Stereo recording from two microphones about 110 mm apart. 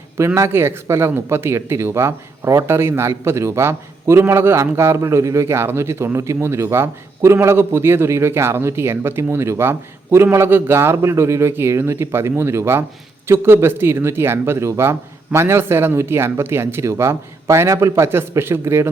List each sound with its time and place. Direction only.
0.3 s a man's voice: 20° right (ahead or behind)